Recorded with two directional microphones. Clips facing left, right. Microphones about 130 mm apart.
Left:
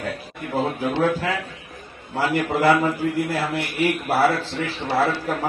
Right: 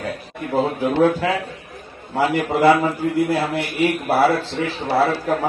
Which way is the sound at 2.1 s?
20° right (ahead or behind).